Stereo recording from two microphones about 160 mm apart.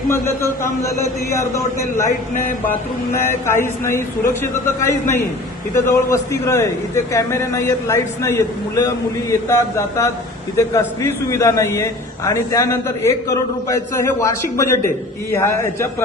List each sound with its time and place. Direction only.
0.1 s a man's voice: 15° left (ahead or behind)